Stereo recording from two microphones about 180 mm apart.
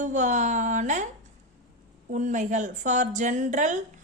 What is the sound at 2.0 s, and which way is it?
A woman's voice, 45° right (ahead or behind).